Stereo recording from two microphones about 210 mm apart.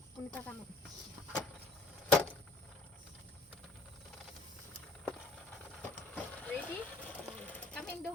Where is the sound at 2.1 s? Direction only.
5° left (ahead or behind).